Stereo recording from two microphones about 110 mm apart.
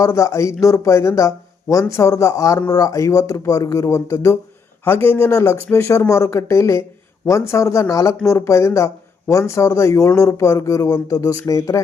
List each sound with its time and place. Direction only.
0.0 s speech: 30° left (ahead or behind)